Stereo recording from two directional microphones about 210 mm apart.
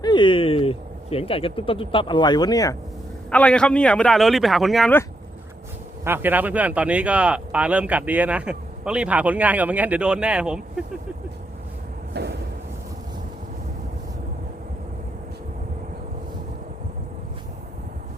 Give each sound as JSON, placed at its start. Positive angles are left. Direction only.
{"t": 0.0, "sound": "speech", "side_deg": 20}
{"t": 3.2, "sound": "a man's voice", "side_deg": 5}
{"t": 6.1, "sound": "speech", "side_deg": -10}
{"t": 12.1, "sound": "a sound", "side_deg": -55}